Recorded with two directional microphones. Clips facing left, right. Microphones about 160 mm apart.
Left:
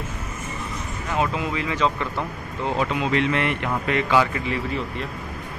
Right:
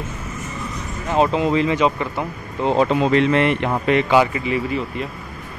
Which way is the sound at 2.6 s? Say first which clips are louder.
Right 7 dB; 30° right (ahead or behind).